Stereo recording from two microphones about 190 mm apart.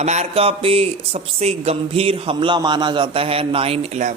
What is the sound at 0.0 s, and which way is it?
Speech, 35° right (ahead or behind).